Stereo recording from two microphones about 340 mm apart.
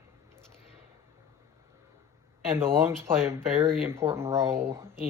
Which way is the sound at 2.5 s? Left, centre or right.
Centre.